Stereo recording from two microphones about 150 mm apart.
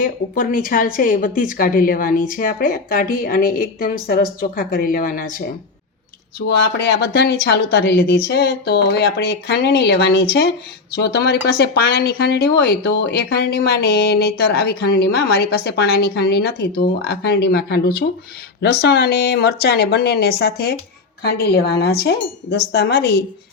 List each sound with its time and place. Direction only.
0.0 s a woman's voice: 65° left (ahead or behind)
6.7 s a woman's voice: 90° left